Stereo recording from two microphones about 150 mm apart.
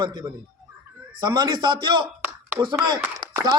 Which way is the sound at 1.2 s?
30° right (ahead or behind).